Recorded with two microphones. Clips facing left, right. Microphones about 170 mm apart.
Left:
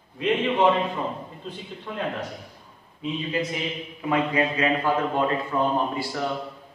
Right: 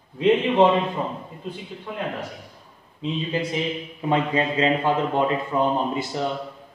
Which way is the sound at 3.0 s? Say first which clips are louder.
Right 1 dB; 25° right (ahead or behind).